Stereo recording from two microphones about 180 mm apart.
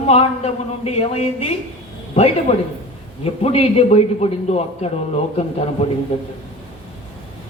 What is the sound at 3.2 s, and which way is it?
A man's voice, 35° left (ahead or behind).